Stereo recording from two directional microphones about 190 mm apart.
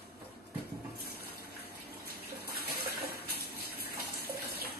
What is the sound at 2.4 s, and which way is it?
Bathtub, 55° right (ahead or behind).